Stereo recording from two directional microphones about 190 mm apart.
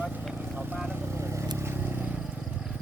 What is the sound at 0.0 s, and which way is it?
Vehicle, 10° right (ahead or behind).